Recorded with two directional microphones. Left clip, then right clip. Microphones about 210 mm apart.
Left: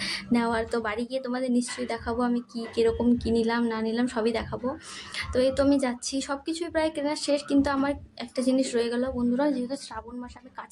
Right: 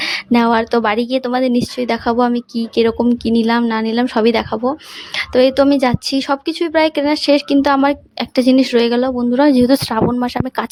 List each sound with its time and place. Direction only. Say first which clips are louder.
0.0 s speech: right 12 dB; 45° right (ahead or behind)